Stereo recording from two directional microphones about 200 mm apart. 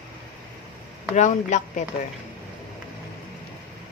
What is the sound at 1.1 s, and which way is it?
Speech, 35° left (ahead or behind).